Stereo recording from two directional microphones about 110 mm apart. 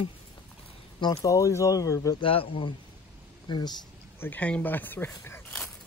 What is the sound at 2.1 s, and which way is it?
Speech, 55° left (ahead or behind).